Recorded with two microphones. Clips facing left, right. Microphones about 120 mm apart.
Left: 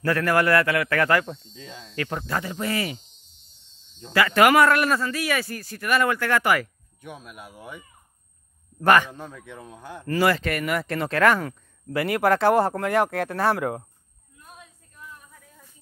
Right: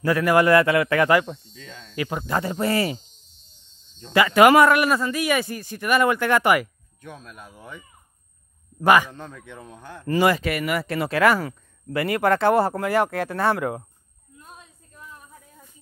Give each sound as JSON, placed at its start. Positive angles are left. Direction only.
{"t": 0.0, "sound": "a man's voice", "side_deg": -15}
{"t": 1.5, "sound": "speech", "side_deg": 20}
{"t": 2.0, "sound": "a man's voice", "side_deg": -10}
{"t": 2.4, "sound": "speech", "side_deg": -35}
{"t": 4.1, "sound": "speech", "side_deg": -20}
{"t": 7.0, "sound": "speech", "side_deg": 10}
{"t": 8.8, "sound": "a man's voice", "side_deg": -10}
{"t": 9.1, "sound": "speech", "side_deg": 5}
{"t": 10.0, "sound": "speech", "side_deg": -20}
{"t": 10.4, "sound": "speech", "side_deg": -5}